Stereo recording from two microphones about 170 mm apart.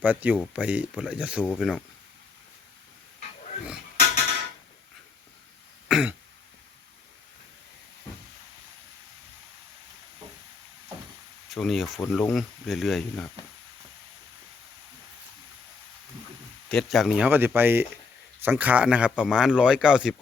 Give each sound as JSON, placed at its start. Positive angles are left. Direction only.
{"t": 0.0, "sound": "speech", "side_deg": -10}
{"t": 5.9, "sound": "throat clearing", "side_deg": -5}
{"t": 11.4, "sound": "speech", "side_deg": 0}
{"t": 16.6, "sound": "speech", "side_deg": 0}
{"t": 17.2, "sound": "speech", "side_deg": -10}